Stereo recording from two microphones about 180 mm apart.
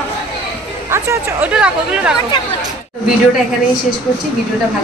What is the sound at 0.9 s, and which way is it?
Speech, 10° right (ahead or behind).